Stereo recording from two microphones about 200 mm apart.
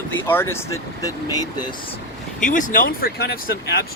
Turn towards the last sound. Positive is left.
turn(degrees=50)  # may be behind; listen again after turning